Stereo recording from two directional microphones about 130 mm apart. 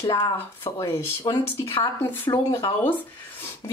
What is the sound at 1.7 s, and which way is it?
Speech, 35° left (ahead or behind).